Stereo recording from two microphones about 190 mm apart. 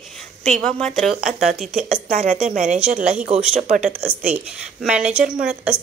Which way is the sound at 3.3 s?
5° right (ahead or behind).